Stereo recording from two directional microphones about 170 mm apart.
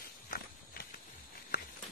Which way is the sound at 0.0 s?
60° left (ahead or behind).